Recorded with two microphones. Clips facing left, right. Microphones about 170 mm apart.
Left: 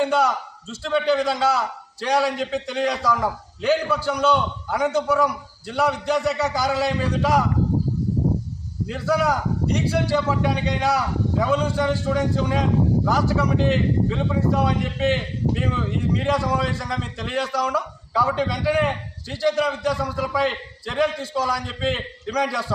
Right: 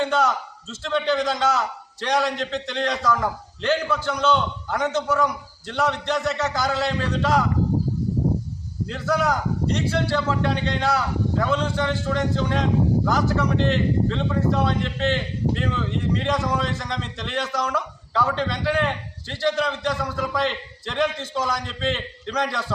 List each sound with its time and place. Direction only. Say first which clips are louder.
0.0 s speech: left 1 dB; 10° left (ahead or behind)
8.9 s speech: left 1 dB; 10° left (ahead or behind)